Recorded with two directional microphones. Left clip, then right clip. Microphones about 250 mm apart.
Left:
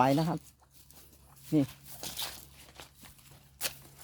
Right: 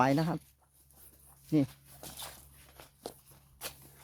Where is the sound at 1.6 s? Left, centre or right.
Left.